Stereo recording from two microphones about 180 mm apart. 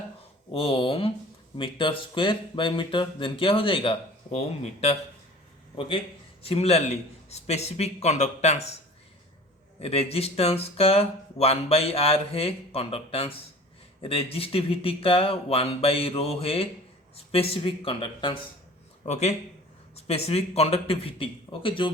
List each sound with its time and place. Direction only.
0.5 s speech: 30° left (ahead or behind)
6.4 s speech: 35° left (ahead or behind)
9.8 s speech: 35° left (ahead or behind)
19.0 s speech: 40° left (ahead or behind)